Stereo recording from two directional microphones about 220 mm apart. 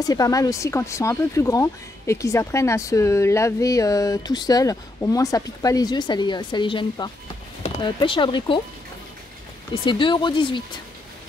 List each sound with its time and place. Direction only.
0.0 s speech: 15° left (ahead or behind)
9.8 s speech: 20° left (ahead or behind)